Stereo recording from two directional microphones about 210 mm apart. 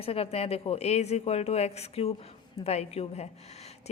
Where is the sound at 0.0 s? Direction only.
30° left (ahead or behind).